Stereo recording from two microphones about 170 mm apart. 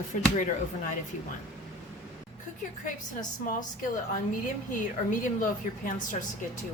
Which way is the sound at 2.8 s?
50° left (ahead or behind).